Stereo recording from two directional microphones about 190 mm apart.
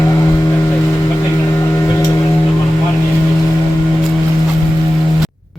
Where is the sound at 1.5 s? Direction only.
15° left (ahead or behind).